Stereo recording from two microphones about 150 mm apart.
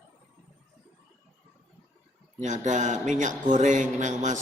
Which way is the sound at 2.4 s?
55° right (ahead or behind).